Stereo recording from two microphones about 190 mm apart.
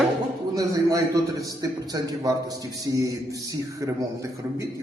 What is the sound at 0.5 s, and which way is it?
A man's voice, 20° right (ahead or behind).